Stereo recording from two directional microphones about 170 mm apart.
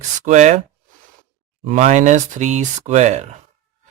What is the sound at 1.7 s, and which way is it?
Speech, 45° right (ahead or behind).